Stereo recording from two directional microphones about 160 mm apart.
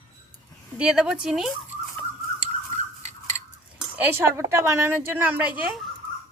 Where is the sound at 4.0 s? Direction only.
15° right (ahead or behind).